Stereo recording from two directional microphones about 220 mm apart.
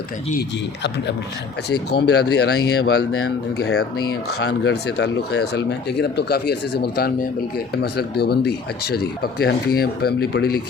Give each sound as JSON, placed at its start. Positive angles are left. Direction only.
{"t": 0.3, "sound": "speech", "side_deg": 50}